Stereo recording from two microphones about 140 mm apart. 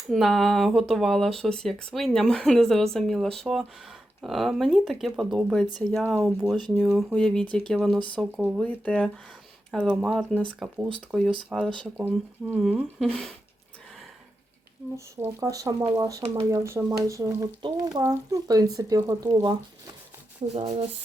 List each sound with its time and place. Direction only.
0.1 s speech: centre (ahead or behind)
9.9 s speech: 5° right (ahead or behind)
11.9 s speech: 15° right (ahead or behind)
12.6 s speech: centre (ahead or behind)
14.9 s speech: 20° right (ahead or behind)
20.5 s speech: 45° right (ahead or behind)